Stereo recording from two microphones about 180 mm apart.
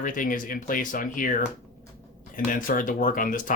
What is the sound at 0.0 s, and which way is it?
Speech, 50° left (ahead or behind).